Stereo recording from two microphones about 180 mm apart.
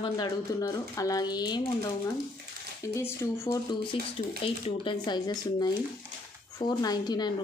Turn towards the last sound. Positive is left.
turn(degrees=20)  # may be behind; listen again after turning